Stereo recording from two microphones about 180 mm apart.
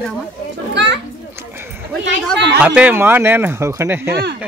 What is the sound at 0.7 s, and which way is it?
Children playing, 80° right.